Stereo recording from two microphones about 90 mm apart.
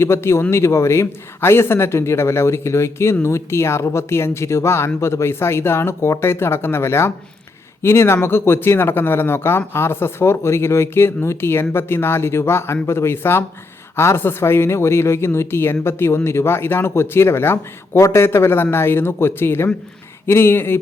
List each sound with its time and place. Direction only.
0.0 s speech: 30° left (ahead or behind)